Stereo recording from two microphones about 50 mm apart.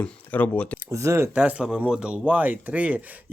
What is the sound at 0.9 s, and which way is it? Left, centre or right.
Speech, right.